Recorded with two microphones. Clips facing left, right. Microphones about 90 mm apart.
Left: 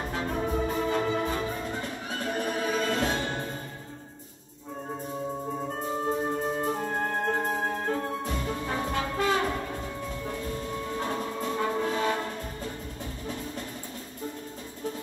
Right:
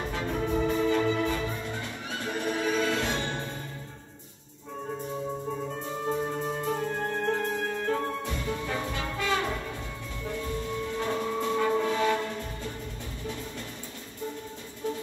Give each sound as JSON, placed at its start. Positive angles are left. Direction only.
{"t": 0.1, "sound": "music", "side_deg": 40}
{"t": 5.8, "sound": "music", "side_deg": 40}
{"t": 11.0, "sound": "train", "side_deg": 40}